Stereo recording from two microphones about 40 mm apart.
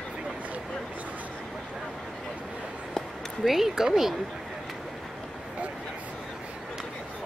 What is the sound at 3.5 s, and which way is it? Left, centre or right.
Speech, centre.